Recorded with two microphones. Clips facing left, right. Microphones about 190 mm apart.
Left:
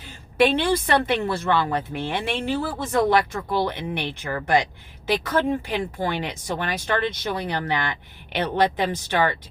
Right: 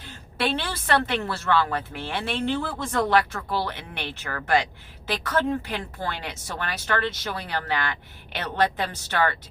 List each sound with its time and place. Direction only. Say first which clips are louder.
0.0 s a woman's voice: left 8 dB; 15° left (ahead or behind)